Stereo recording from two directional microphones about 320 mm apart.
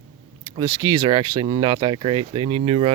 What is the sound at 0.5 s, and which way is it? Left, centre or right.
Speech, centre.